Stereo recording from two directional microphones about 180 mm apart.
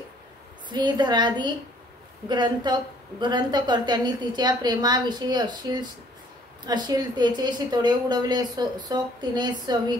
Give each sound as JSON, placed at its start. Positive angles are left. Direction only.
{"t": 0.7, "sound": "a woman's voice", "side_deg": -25}